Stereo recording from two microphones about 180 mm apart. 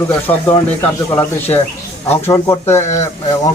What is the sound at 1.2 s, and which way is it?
Speech, 10° left (ahead or behind).